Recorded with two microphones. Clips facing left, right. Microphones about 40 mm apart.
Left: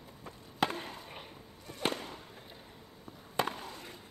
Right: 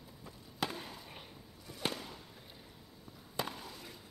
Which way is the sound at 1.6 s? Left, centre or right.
Left.